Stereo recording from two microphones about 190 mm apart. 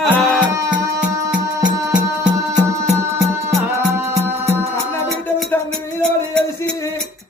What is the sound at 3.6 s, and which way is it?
Music, 10° right (ahead or behind).